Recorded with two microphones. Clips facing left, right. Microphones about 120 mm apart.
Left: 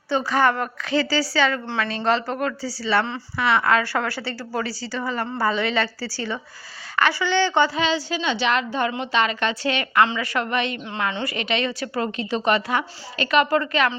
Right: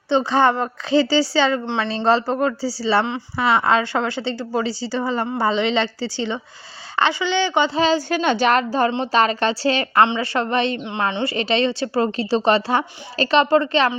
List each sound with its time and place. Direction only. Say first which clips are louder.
0.1 s a woman's voice: right 3 dB; 25° right (ahead or behind)
7.8 s a woman's voice: right 5 dB; 40° right (ahead or behind)
8.1 s a woman's voice: right 5 dB; 50° right (ahead or behind); by 13.9 s 30° right (ahead or behind)